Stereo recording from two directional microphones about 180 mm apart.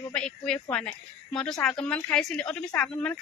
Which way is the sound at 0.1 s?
5° left (ahead or behind).